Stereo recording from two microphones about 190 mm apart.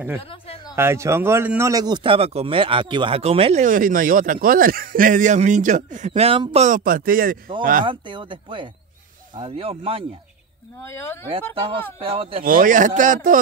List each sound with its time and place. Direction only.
0.2 s speech: 30° left (ahead or behind)
0.7 s speech: 15° right (ahead or behind); by 3.6 s 30° right (ahead or behind)
3.6 s a man's voice: 45° right (ahead or behind)
7.8 s speech: 25° right (ahead or behind)
10.8 s speech: 15° left (ahead or behind)
11.5 s speech: 30° right (ahead or behind)
12.4 s a man's voice: 45° right (ahead or behind)